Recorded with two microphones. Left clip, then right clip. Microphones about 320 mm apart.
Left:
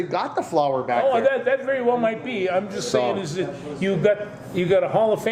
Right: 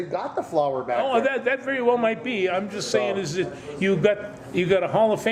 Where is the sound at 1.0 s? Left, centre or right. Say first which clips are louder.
Left 3 dB; right.